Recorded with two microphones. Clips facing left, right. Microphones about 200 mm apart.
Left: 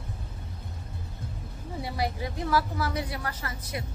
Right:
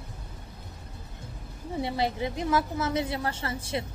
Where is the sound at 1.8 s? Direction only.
25° right (ahead or behind).